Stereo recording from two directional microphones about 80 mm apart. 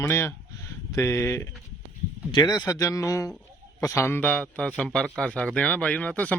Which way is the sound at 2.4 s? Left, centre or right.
Left.